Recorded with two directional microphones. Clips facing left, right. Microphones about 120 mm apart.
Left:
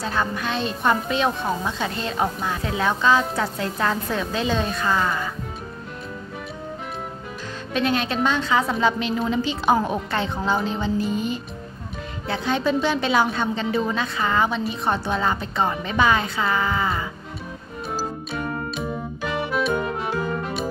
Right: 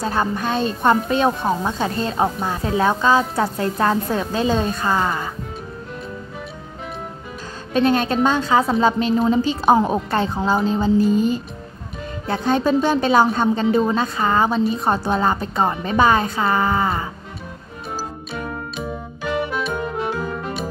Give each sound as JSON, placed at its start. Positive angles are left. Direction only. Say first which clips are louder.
{"t": 0.0, "sound": "a woman's voice", "louder": "right 4 dB", "side_deg": -40}
{"t": 7.7, "sound": "a woman's voice", "louder": "right 5 dB", "side_deg": -45}
{"t": 18.3, "sound": "music", "louder": "right 1 dB", "side_deg": 0}